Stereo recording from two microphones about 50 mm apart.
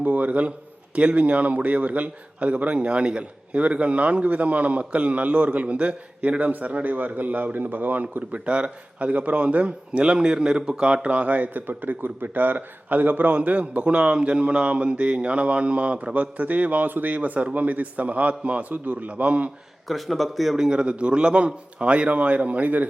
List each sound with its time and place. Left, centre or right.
0.0 s a man's voice: right
19.9 s speech: centre
20.7 s a man's voice: right